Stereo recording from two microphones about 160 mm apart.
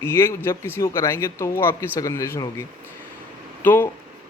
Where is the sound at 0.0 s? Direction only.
15° left (ahead or behind).